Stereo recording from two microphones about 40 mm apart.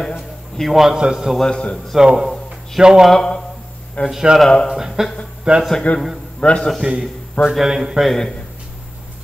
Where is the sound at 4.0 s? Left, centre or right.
Left.